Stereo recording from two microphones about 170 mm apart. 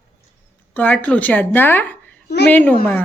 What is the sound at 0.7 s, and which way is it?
Speech, 10° left (ahead or behind).